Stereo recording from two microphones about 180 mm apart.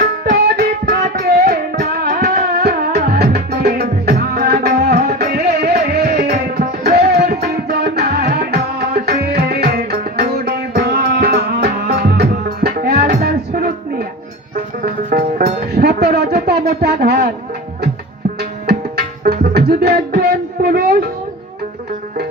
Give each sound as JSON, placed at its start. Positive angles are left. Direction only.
{"t": 0.0, "sound": "music", "side_deg": -60}
{"t": 15.1, "sound": "music", "side_deg": -55}
{"t": 18.6, "sound": "music", "side_deg": -60}